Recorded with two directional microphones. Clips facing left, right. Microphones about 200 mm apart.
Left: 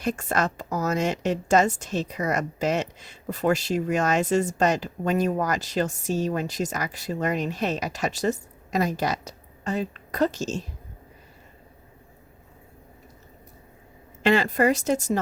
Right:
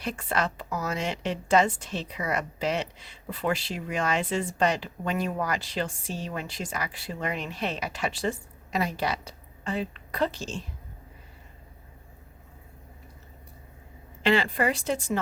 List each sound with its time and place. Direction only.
0.0 s a woman's voice: 45° left (ahead or behind)
14.2 s a woman's voice: 45° left (ahead or behind)